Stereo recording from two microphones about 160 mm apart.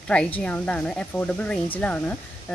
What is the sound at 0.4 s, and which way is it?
Speech, 5° left (ahead or behind).